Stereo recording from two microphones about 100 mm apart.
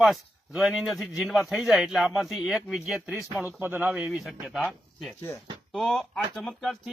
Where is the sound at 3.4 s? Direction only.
20° right (ahead or behind).